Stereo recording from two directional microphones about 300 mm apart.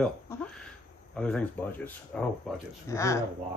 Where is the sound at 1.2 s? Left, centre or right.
Centre.